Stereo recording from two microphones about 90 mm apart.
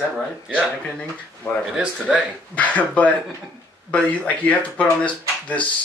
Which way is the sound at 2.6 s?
15° left (ahead or behind).